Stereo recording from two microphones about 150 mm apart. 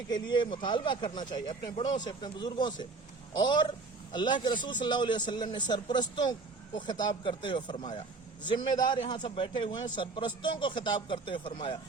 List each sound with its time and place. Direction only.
0.1 s a man's voice: 30° left (ahead or behind)